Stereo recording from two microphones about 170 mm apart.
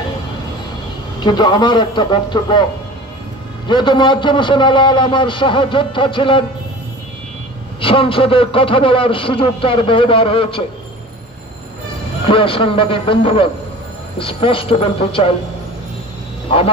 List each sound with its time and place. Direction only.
1.2 s a man's voice: 25° left (ahead or behind)
3.6 s a man's voice: 25° left (ahead or behind)
7.8 s a man's voice: 30° left (ahead or behind)
12.3 s a man's voice: 30° left (ahead or behind)
16.4 s speech: 35° left (ahead or behind)